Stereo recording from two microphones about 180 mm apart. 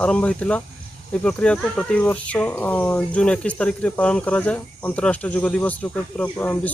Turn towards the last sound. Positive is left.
turn(degrees=10)  # may be behind; listen again after turning